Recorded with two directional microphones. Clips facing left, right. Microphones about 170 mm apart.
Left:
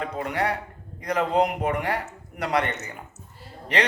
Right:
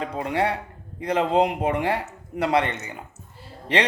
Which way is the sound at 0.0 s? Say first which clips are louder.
Right 2 dB; 25° right (ahead or behind).